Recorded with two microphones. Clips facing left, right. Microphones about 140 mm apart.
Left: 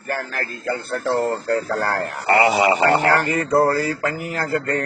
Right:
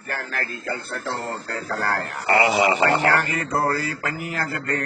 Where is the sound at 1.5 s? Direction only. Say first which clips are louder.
Left 5 dB; 35° left (ahead or behind).